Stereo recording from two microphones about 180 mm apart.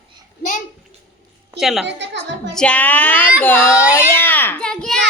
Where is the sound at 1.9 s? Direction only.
75° right (ahead or behind).